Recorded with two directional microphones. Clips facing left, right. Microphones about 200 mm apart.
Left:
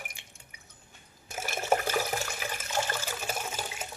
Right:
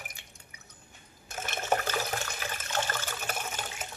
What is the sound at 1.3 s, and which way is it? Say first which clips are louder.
Water: left 2 dB; 10° left (ahead or behind).